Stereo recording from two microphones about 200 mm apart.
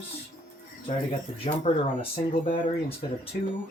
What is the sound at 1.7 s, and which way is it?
Speech, 30° left (ahead or behind).